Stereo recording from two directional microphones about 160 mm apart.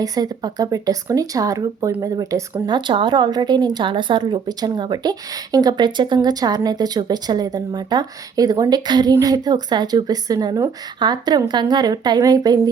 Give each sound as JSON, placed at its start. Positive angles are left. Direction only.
{"t": 0.0, "sound": "a woman's voice", "side_deg": -25}